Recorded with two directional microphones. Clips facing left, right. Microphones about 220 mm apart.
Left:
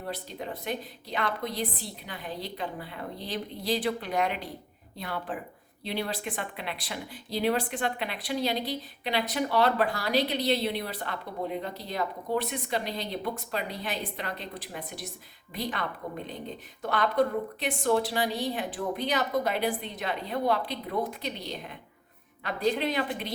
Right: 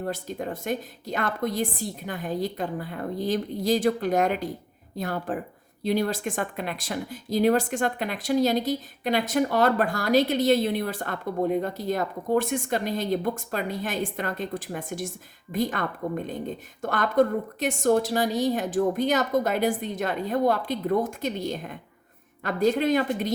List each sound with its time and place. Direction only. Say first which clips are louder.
0.0 s speech: right 6 dB; 45° right (ahead or behind)